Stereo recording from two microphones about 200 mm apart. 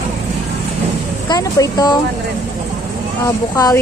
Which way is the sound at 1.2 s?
20° left (ahead or behind).